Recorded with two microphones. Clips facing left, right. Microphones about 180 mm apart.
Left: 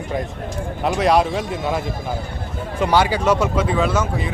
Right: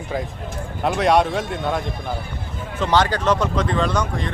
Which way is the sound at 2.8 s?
10° left (ahead or behind).